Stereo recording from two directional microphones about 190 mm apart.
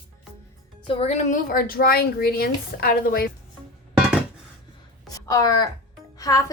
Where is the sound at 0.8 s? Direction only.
30° left (ahead or behind); by 3.3 s 50° left (ahead or behind).